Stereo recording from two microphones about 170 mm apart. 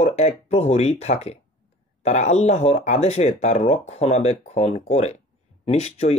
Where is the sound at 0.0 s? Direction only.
40° left (ahead or behind).